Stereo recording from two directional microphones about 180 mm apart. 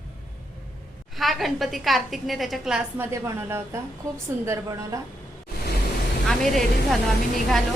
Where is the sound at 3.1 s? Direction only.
15° right (ahead or behind).